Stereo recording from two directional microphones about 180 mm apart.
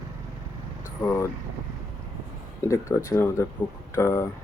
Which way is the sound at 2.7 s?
15° left (ahead or behind).